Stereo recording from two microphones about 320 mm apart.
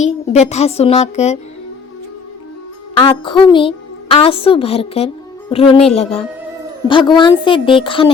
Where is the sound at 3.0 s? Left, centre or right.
Centre.